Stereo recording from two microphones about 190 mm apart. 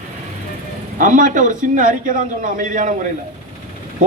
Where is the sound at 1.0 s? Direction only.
40° right (ahead or behind).